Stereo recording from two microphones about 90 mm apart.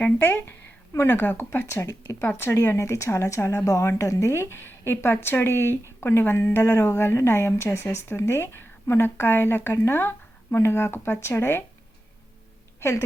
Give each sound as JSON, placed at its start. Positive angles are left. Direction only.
{"t": 0.0, "sound": "a woman's voice", "side_deg": 20}